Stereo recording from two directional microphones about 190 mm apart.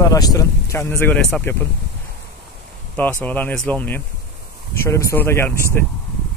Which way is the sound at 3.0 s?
10° left (ahead or behind).